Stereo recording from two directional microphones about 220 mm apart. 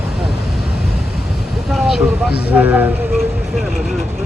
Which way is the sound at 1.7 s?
Centre (ahead or behind).